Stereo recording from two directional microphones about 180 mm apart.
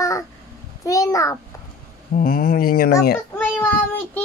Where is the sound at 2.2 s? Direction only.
50° left (ahead or behind).